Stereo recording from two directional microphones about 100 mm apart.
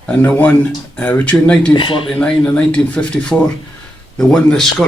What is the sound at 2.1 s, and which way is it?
Speech, 10° left (ahead or behind).